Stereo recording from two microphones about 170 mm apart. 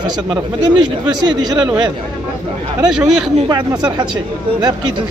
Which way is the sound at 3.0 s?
5° right (ahead or behind).